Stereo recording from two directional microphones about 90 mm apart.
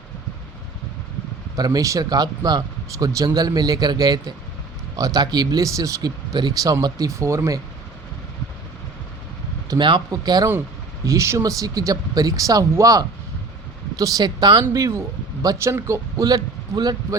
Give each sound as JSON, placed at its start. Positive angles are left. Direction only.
{"t": 1.5, "sound": "speech", "side_deg": -45}
{"t": 6.3, "sound": "speech", "side_deg": -50}
{"t": 9.6, "sound": "speech", "side_deg": -60}
{"t": 10.1, "sound": "speech", "side_deg": -45}
{"t": 11.0, "sound": "speech", "side_deg": -35}
{"t": 14.7, "sound": "speech", "side_deg": -35}
{"t": 16.2, "sound": "speech", "side_deg": -50}